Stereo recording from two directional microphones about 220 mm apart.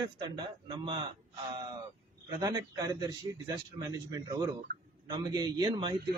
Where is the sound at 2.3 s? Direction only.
20° right (ahead or behind).